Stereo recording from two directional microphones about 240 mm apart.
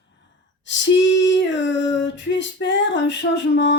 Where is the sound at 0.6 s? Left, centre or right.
Left.